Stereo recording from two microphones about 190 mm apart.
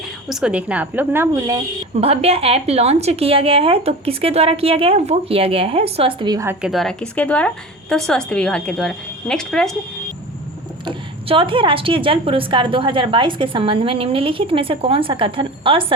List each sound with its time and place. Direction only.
0.3 s speech: 5° right (ahead or behind)
2.0 s a woman's voice: 30° right (ahead or behind); by 9.7 s 5° left (ahead or behind)
10.8 s a woman's voice: 25° right (ahead or behind)